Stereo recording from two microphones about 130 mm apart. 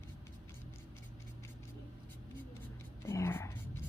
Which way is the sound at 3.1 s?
20° left (ahead or behind).